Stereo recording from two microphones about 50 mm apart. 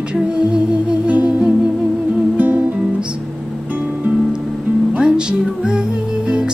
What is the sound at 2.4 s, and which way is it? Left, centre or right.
Music, right.